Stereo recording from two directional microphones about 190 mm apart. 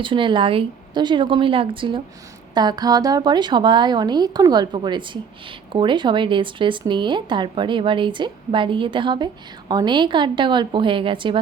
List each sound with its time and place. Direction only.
0.0 s speech: 25° right (ahead or behind)